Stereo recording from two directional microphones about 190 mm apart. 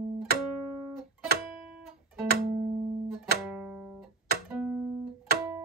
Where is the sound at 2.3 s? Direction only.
55° right (ahead or behind).